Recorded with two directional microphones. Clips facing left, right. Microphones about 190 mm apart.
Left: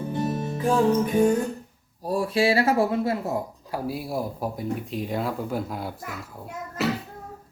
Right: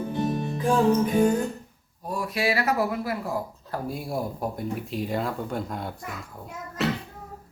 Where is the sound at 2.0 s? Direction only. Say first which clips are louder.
Left 5 dB; 30° left (ahead or behind).